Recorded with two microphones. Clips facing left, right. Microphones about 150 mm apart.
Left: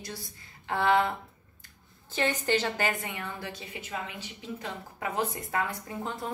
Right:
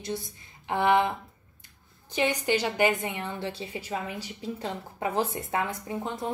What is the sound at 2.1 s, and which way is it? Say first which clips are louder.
A woman's voice: right 2 dB; 15° right (ahead or behind).